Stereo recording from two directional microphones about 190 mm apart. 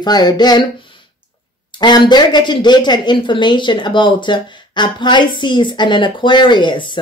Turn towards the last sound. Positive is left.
turn(degrees=25)  # may be behind; listen again after turning